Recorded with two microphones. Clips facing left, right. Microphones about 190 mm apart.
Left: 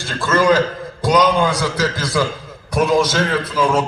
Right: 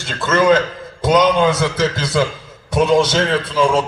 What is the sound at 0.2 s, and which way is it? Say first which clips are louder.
A man's voice: right 1 dB; 20° right (ahead or behind).